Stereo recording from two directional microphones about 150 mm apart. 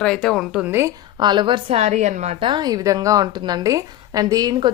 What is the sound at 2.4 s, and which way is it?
A woman's voice, 30° right (ahead or behind).